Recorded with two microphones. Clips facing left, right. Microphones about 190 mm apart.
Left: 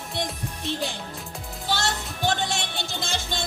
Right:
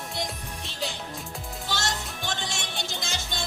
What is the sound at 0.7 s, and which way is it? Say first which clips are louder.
Music: left 6 dB; 55° left (ahead or behind).